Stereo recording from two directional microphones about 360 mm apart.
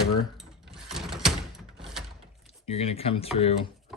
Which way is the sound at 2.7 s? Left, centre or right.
Centre.